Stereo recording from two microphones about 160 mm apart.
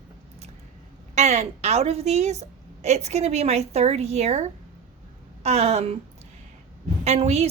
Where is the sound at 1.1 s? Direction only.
45° right (ahead or behind).